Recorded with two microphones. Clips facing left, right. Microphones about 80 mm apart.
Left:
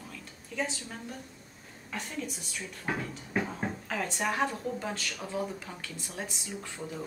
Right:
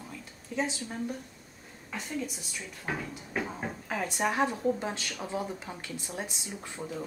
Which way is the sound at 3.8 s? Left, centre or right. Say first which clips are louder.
Right 3 dB; centre.